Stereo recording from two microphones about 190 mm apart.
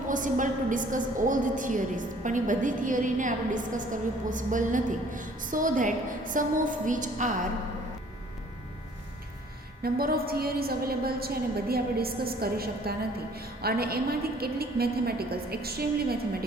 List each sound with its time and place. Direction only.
0.1 s a woman's voice: 45° right (ahead or behind)
9.8 s a woman's voice: 50° right (ahead or behind)